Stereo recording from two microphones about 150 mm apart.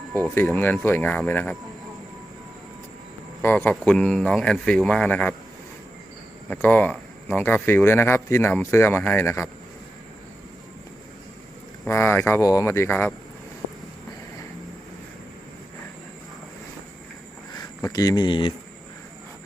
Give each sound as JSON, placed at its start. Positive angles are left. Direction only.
{"t": 0.3, "sound": "speech", "side_deg": 10}
{"t": 3.4, "sound": "speech", "side_deg": 10}
{"t": 6.5, "sound": "speech", "side_deg": 10}
{"t": 11.9, "sound": "speech", "side_deg": 15}
{"t": 17.5, "sound": "speech", "side_deg": 25}